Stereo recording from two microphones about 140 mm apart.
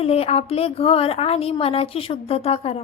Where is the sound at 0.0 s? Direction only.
45° left (ahead or behind).